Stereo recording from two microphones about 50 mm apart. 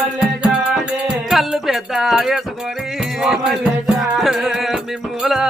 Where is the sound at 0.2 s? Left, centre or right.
Centre.